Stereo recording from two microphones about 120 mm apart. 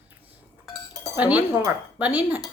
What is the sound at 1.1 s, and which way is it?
Speech, 10° right (ahead or behind).